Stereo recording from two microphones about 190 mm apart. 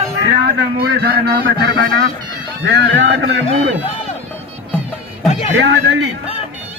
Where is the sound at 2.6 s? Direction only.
70° right (ahead or behind).